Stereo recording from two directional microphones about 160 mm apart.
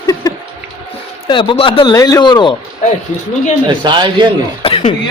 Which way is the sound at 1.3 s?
30° left (ahead or behind).